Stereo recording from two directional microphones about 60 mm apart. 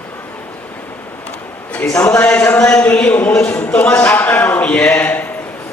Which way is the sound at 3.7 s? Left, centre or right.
Centre.